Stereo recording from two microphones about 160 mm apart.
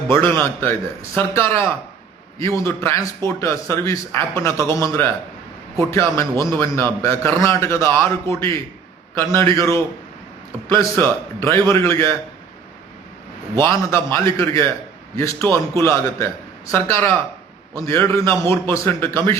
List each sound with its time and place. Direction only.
0.1 s a man's voice: 15° left (ahead or behind)
13.6 s a man's voice: 15° left (ahead or behind)